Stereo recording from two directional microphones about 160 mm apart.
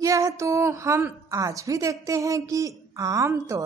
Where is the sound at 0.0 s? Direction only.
20° right (ahead or behind).